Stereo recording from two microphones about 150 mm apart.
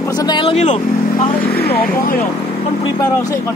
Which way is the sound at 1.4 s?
90° left.